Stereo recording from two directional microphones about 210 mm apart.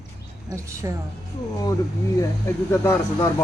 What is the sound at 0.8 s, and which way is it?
Speech, 15° right (ahead or behind).